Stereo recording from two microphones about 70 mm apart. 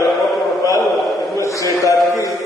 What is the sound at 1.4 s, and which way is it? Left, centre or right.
Speech, left.